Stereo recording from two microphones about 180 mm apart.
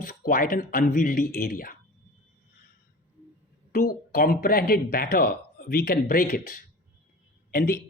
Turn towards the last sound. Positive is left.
turn(degrees=55)  # may be behind; listen again after turning